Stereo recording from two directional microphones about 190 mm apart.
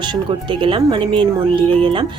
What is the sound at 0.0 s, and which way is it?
Speech, 25° right (ahead or behind).